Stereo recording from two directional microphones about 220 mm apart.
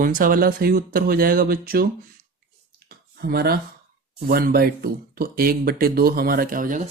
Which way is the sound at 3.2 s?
45° right (ahead or behind).